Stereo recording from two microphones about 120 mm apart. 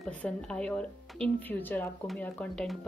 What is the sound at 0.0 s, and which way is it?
A woman's voice, 5° left (ahead or behind).